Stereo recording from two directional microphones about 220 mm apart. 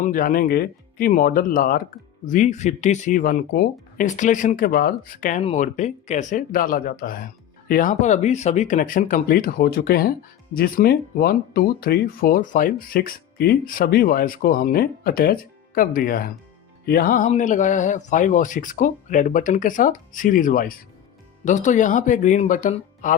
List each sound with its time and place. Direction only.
0.0 s speech: 40° left (ahead or behind)